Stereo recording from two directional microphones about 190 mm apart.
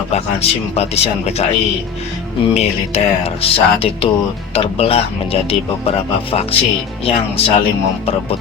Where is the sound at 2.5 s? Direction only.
35° left (ahead or behind).